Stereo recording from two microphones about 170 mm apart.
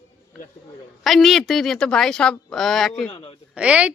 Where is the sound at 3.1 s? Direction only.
30° left (ahead or behind).